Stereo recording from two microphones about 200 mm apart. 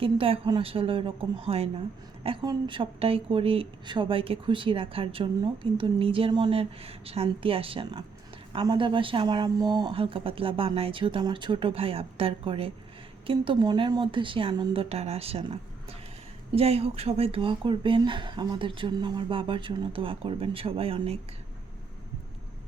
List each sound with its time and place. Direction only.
0.0 s speech: 25° right (ahead or behind)